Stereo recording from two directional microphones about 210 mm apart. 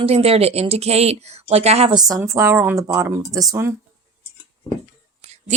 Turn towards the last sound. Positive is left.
turn(degrees=-30)  # may be behind; listen again after turning